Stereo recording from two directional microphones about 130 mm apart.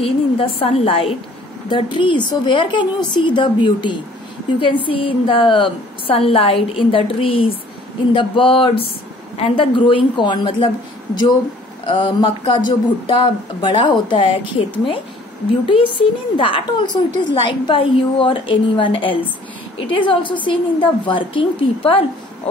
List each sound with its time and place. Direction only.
0.0 s a woman's voice: 45° left (ahead or behind)
11.8 s speech: 40° left (ahead or behind)
16.0 s speech: 40° left (ahead or behind)